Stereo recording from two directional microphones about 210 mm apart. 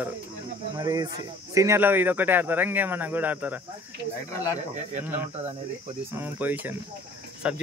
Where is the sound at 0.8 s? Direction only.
15° right (ahead or behind).